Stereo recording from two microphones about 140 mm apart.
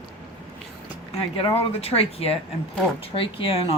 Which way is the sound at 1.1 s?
45° left (ahead or behind).